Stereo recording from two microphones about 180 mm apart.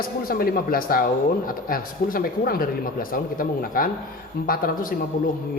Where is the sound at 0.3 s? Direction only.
55° left (ahead or behind).